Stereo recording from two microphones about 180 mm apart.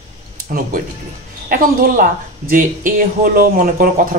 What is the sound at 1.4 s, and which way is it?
Speech, 50° right (ahead or behind).